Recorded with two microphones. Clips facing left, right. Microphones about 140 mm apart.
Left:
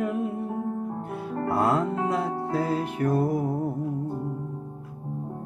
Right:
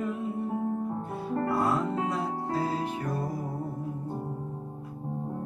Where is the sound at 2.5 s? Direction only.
60° left (ahead or behind).